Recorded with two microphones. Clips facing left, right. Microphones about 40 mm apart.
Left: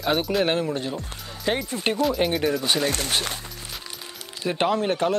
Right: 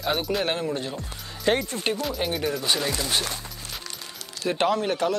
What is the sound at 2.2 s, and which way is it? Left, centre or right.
Speech, centre.